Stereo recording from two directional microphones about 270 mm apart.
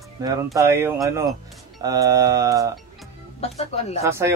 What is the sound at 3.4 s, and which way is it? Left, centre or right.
Speech, left.